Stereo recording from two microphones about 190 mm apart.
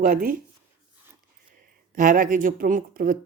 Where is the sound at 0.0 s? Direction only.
45° right (ahead or behind).